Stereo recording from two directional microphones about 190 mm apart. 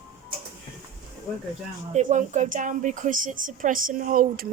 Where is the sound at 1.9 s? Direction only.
40° right (ahead or behind).